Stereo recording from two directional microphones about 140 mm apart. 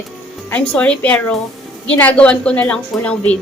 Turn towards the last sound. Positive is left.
turn(degrees=10)  # may be behind; listen again after turning